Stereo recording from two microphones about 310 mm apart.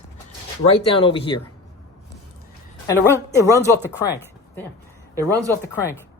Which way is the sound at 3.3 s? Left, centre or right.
Centre.